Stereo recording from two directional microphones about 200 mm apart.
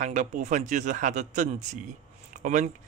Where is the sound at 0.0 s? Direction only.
40° right (ahead or behind).